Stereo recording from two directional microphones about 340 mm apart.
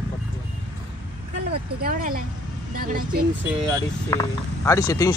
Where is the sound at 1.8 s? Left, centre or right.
Right.